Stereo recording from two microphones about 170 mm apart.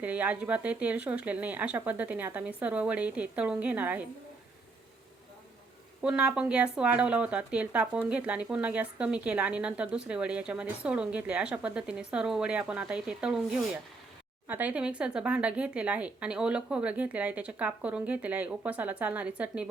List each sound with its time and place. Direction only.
0.0 s speech: 10° right (ahead or behind)
6.0 s speech: 5° right (ahead or behind)